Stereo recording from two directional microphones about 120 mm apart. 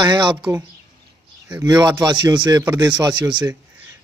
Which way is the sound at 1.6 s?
35° right (ahead or behind).